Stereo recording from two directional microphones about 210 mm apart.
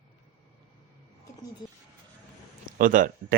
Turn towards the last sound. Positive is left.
turn(degrees=-40)  # may be behind; listen again after turning